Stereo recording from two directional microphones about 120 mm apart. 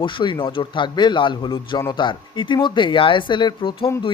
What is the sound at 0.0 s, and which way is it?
A man's voice, 45° left (ahead or behind).